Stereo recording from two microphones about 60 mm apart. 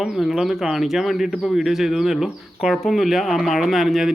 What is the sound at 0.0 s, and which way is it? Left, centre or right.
Speech, centre.